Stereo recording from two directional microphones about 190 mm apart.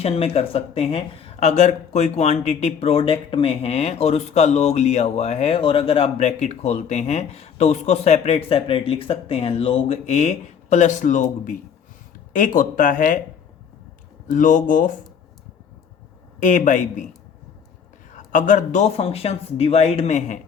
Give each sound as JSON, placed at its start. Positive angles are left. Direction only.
{"t": 0.0, "sound": "speech", "side_deg": 30}
{"t": 14.3, "sound": "speech", "side_deg": 45}
{"t": 16.4, "sound": "speech", "side_deg": 40}
{"t": 18.1, "sound": "speech", "side_deg": 40}